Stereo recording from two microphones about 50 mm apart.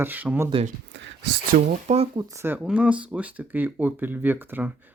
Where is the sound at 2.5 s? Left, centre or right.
Right.